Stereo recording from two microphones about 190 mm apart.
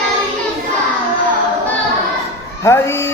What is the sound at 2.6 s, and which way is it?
Speech, 15° left (ahead or behind).